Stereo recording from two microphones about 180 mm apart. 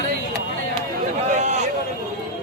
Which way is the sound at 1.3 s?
40° right (ahead or behind).